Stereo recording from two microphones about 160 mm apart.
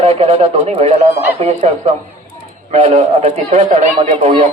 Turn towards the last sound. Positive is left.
turn(degrees=-40)  # may be behind; listen again after turning